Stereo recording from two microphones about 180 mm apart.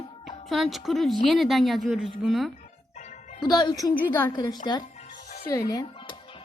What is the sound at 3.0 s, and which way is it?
Music, 40° left (ahead or behind).